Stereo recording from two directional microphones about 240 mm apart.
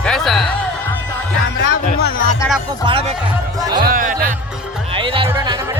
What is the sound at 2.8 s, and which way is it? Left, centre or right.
Speech, right.